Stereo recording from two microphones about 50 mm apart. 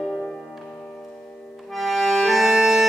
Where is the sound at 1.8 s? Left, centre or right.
Centre.